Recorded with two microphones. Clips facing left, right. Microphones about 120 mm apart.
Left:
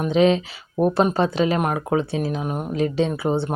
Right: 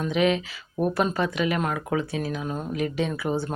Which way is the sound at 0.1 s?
30° left (ahead or behind).